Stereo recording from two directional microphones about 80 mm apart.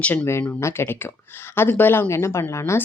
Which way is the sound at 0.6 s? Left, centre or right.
Left.